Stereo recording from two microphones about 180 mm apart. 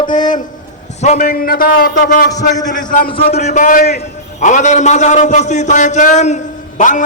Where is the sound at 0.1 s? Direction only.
45° left (ahead or behind).